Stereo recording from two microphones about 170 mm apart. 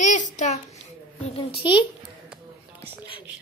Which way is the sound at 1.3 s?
30° left (ahead or behind).